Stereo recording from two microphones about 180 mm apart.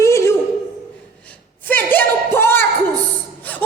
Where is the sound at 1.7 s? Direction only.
10° left (ahead or behind).